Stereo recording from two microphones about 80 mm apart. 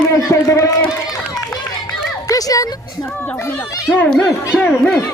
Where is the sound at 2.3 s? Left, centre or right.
Left.